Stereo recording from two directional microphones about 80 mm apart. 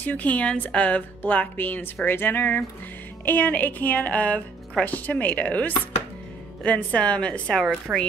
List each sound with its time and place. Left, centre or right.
0.0 s a woman's voice: centre
7.9 s speech: centre